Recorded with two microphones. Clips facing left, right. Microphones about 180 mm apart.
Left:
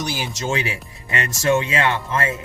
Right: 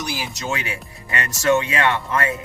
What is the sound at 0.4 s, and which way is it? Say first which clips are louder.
Speech: left 4 dB; 25° left (ahead or behind).